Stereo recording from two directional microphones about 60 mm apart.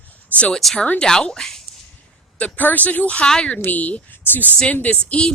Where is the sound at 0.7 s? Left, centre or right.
Left.